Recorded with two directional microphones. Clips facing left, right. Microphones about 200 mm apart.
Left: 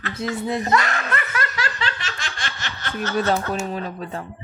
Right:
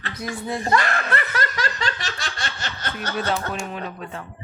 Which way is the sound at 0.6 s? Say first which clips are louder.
Even; 35° right (ahead or behind).